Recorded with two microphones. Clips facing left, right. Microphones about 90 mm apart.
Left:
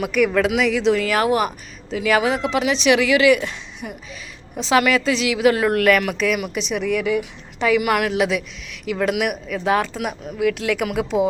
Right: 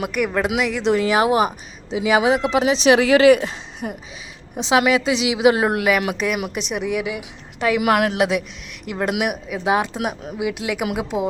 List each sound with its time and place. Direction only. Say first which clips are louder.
0.0 s speech: left 3 dB; 10° right (ahead or behind); by 3.9 s 30° right (ahead or behind)
4.5 s speech: even; 20° right (ahead or behind)
8.1 s speech: even; 70° right (ahead or behind)
9.0 s speech: even; 20° right (ahead or behind)